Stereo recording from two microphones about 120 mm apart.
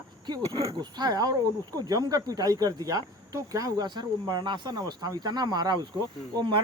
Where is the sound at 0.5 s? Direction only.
55° right (ahead or behind).